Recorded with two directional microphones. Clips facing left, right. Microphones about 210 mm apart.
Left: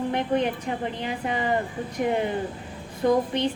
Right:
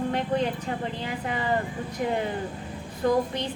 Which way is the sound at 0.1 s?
20° left (ahead or behind).